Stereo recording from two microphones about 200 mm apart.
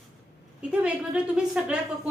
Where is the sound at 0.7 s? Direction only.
5° right (ahead or behind).